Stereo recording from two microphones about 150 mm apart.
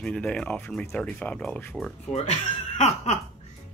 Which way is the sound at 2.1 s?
45° left (ahead or behind).